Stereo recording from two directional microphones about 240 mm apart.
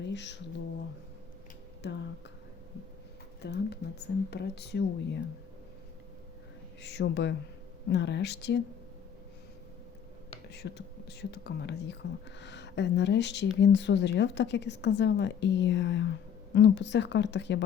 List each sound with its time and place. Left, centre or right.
0.0 s speech: left
1.8 s speech: left
3.4 s speech: left
6.8 s speech: left
10.5 s speech: left